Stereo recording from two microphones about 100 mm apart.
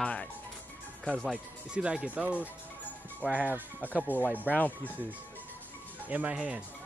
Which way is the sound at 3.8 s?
15° left (ahead or behind).